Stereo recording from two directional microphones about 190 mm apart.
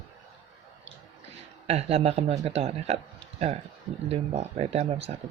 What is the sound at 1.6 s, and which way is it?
A man's voice, 35° right (ahead or behind).